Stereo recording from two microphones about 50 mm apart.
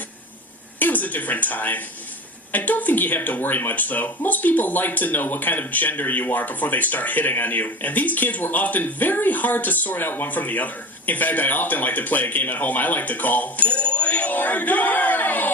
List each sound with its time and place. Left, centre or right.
0.8 s speech: left